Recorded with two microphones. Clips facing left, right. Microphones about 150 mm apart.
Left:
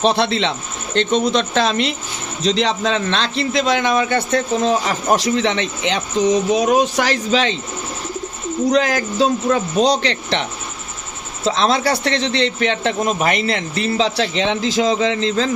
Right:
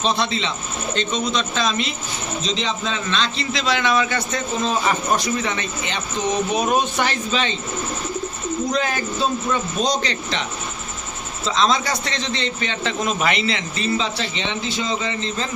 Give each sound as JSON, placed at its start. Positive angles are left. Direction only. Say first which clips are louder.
{"t": 0.0, "sound": "a man's voice", "louder": "left 5 dB", "side_deg": 70}
{"t": 8.7, "sound": "a man's voice", "louder": "left 6 dB", "side_deg": 85}
{"t": 11.4, "sound": "a man's voice", "louder": "left 3 dB", "side_deg": 60}
{"t": 13.1, "sound": "a man's voice", "louder": "left 3 dB", "side_deg": 45}